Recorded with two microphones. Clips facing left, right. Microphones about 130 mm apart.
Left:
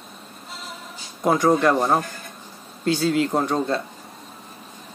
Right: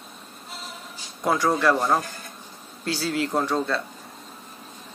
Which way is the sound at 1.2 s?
20° left (ahead or behind).